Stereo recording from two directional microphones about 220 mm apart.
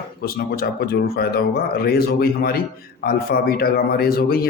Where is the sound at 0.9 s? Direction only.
45° left (ahead or behind).